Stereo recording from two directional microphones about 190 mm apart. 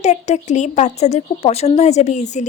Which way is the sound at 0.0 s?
40° left (ahead or behind).